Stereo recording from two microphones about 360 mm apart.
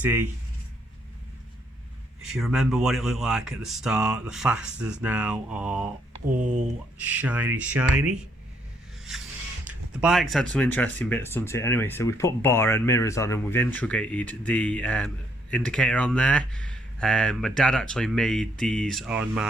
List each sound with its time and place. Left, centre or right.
0.0 s speech: centre
2.3 s speech: centre
6.4 s speech: centre
7.0 s speech: centre
9.1 s music: centre
9.6 s speech: centre